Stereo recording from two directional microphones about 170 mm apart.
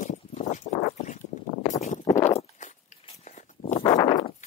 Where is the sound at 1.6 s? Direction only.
45° left (ahead or behind).